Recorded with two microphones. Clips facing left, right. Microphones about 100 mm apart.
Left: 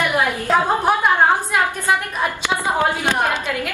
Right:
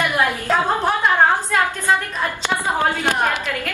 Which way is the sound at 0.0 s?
15° left (ahead or behind).